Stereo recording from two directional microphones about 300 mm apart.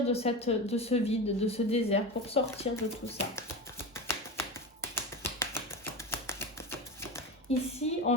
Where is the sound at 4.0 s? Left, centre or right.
Centre.